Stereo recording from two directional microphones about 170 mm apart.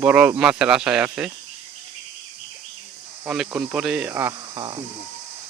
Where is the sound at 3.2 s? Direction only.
Centre (ahead or behind).